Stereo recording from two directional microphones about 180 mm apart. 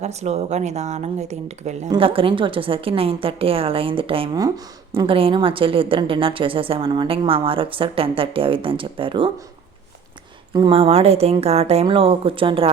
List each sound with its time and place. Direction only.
0.0 s a woman's voice: 35° right (ahead or behind)
4.4 s a woman's voice: 20° right (ahead or behind)
10.5 s a woman's voice: 25° right (ahead or behind)